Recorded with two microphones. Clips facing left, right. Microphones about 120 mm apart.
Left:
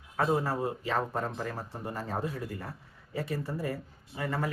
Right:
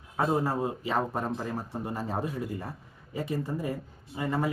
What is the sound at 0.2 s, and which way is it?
Speech, 15° right (ahead or behind).